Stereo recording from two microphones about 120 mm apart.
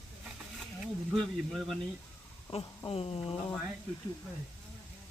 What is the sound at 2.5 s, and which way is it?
Speech, 60° left (ahead or behind).